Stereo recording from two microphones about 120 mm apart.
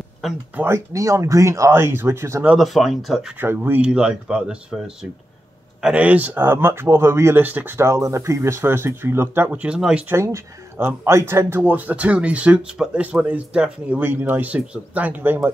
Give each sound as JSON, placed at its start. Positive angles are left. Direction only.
{"t": 0.2, "sound": "speech", "side_deg": 0}
{"t": 0.6, "sound": "speech", "side_deg": -20}
{"t": 2.4, "sound": "speech", "side_deg": -5}
{"t": 3.3, "sound": "speech", "side_deg": -15}
{"t": 3.8, "sound": "speech", "side_deg": -5}
{"t": 10.0, "sound": "speech", "side_deg": -25}